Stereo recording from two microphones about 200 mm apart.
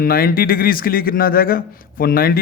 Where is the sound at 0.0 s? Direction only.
50° left (ahead or behind).